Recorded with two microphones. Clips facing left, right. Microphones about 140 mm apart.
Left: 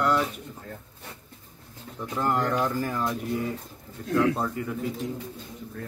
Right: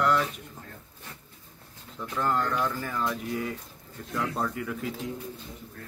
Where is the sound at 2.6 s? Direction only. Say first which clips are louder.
Left 4 dB; 40° left (ahead or behind).